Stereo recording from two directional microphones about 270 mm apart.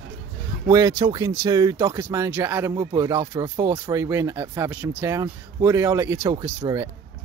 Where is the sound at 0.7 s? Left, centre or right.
Centre.